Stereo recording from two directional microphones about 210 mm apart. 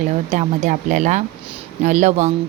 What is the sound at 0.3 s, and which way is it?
A woman's voice, 35° right (ahead or behind).